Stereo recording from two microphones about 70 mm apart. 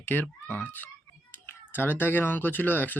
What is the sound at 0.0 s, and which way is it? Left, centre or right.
A child's voice, left.